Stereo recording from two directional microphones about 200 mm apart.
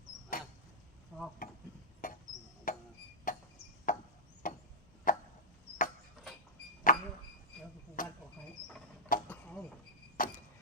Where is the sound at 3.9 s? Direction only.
45° left (ahead or behind).